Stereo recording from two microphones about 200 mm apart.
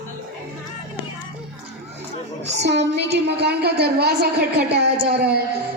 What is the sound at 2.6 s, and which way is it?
A woman's voice, 60° right (ahead or behind).